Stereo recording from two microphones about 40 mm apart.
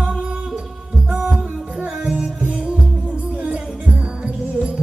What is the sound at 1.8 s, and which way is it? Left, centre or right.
Music, centre.